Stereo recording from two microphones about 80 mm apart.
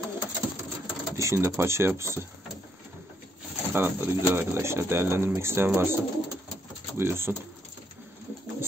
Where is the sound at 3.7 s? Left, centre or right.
Right.